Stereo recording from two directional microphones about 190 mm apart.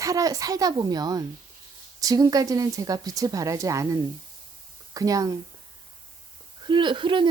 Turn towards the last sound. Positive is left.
turn(degrees=-25)  # may be behind; listen again after turning